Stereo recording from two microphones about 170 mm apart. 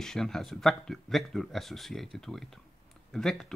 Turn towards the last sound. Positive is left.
turn(degrees=0)  # may be behind; listen again after turning